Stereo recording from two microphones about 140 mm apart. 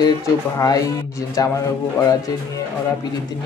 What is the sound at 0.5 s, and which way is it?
Speech, 25° left (ahead or behind).